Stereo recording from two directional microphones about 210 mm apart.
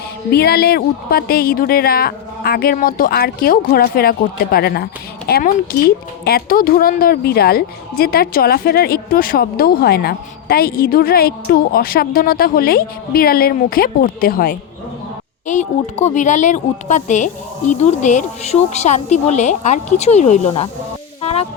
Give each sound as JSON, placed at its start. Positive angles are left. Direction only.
{"t": 0.3, "sound": "speech", "side_deg": 50}
{"t": 15.4, "sound": "a woman's voice", "side_deg": 35}
{"t": 21.2, "sound": "music", "side_deg": 30}